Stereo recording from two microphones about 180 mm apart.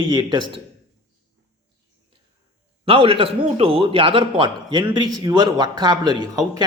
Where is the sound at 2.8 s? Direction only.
30° right (ahead or behind).